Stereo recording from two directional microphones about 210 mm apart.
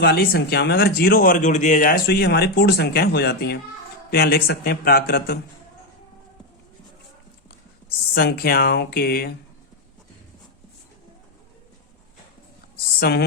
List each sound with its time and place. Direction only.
0.0 s speech: 50° left (ahead or behind)
8.1 s speech: 50° left (ahead or behind)
13.0 s speech: 50° left (ahead or behind)